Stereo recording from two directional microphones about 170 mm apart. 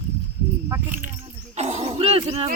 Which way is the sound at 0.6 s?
10° right (ahead or behind).